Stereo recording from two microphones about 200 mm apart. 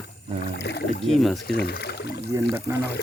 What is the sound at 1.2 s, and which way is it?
Speech, centre (ahead or behind).